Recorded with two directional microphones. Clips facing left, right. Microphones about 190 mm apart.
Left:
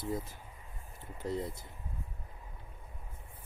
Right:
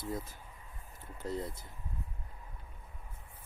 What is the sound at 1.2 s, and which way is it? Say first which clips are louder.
Speech: left 2 dB; 20° left (ahead or behind).